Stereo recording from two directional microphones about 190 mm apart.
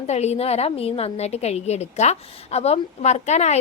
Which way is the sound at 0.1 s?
35° left (ahead or behind).